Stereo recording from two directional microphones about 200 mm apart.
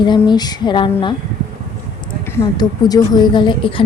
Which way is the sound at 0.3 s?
20° left (ahead or behind).